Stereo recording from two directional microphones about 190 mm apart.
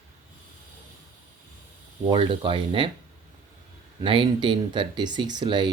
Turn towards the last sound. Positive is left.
turn(degrees=-25)  # may be behind; listen again after turning